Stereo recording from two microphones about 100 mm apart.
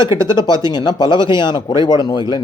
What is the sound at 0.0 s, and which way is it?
A man's voice, 50° left (ahead or behind).